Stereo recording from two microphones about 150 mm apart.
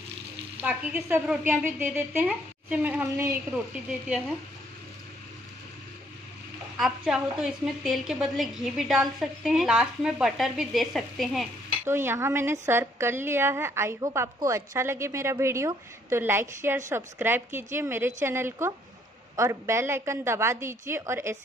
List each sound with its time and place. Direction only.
0.6 s a woman's voice: 10° right (ahead or behind)
6.8 s a woman's voice: 5° right (ahead or behind)
11.8 s a woman's voice: 15° right (ahead or behind)